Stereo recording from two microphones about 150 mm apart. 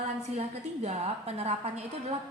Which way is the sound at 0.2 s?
45° right (ahead or behind).